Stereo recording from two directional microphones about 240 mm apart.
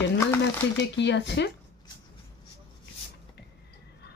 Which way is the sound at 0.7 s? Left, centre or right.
Left.